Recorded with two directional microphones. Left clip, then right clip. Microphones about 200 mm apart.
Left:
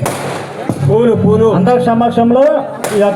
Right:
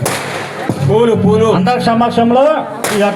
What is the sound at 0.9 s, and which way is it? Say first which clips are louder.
A man's voice: even; 55° left (ahead or behind).